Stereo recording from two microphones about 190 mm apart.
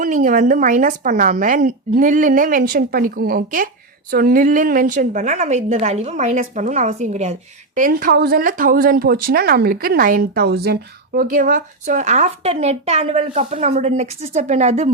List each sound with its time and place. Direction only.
0.0 s a woman's voice: 45° right (ahead or behind)
7.8 s speech: 50° right (ahead or behind)